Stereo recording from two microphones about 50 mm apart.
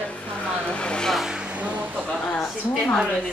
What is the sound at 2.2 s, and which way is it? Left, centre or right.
Speech, centre.